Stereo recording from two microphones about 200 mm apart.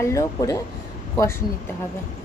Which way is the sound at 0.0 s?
15° left (ahead or behind).